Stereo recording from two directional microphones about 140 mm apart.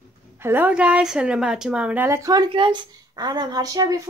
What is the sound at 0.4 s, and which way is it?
A woman's voice, 15° right (ahead or behind).